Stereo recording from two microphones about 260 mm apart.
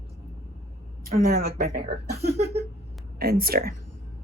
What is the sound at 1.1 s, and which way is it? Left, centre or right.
A woman's voice, right.